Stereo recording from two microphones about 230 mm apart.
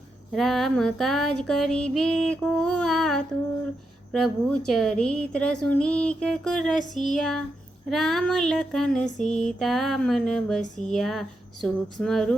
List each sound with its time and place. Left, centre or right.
0.3 s female singing: centre
10.6 s speech: left
10.9 s female singing: centre